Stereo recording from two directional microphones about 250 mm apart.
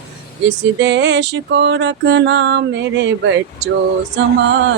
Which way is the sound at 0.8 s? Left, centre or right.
Right.